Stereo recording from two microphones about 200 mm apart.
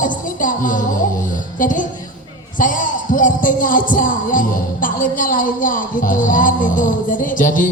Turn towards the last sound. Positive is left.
turn(degrees=40)  # may be behind; listen again after turning